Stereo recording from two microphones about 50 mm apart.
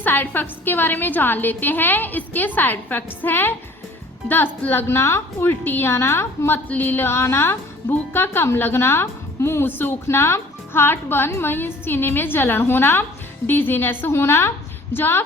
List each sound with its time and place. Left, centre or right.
0.0 s a woman's voice: left
4.9 s a woman's voice: left
5.4 s a woman's voice: left
5.9 s a woman's voice: left
6.7 s a woman's voice: left
7.1 s a woman's voice: left
7.9 s a woman's voice: left